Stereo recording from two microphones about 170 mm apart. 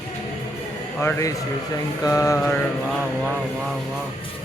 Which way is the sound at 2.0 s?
20° left (ahead or behind).